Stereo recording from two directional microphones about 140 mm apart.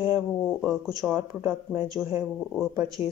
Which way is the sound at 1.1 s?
20° right (ahead or behind).